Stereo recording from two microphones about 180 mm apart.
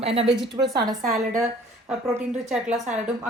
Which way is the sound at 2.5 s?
Centre (ahead or behind).